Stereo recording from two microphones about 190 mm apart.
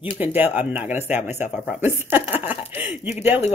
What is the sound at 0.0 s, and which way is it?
Speech, 10° right (ahead or behind).